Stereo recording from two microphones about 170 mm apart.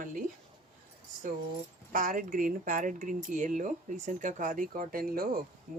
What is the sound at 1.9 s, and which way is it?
Speech, 55° right (ahead or behind).